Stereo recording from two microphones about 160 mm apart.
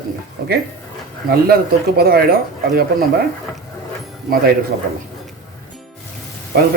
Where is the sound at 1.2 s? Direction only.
70° right (ahead or behind).